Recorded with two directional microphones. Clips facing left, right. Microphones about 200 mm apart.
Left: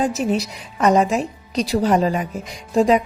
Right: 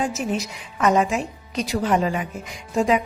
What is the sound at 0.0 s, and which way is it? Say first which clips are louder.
Speech: left 4 dB; 35° left (ahead or behind).